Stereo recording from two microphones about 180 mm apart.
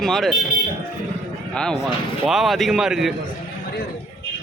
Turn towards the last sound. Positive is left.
turn(degrees=0)  # may be behind; listen again after turning